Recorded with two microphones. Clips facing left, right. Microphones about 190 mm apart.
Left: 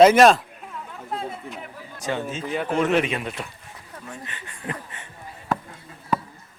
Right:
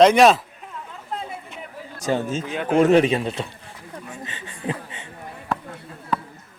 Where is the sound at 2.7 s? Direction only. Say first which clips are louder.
Right 7 dB; 40° right (ahead or behind).